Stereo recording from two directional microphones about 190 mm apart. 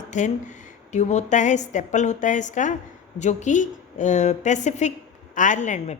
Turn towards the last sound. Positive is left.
turn(degrees=40)  # may be behind; listen again after turning